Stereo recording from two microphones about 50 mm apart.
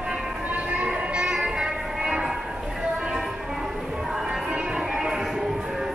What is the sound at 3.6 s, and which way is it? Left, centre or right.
Music, centre.